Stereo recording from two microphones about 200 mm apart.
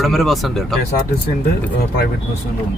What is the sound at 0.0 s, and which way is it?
Speech, centre (ahead or behind).